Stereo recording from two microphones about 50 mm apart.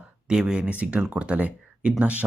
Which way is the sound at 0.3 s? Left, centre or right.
Centre.